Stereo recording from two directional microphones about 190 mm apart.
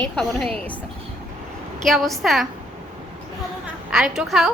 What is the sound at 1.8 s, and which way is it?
Speech, centre (ahead or behind).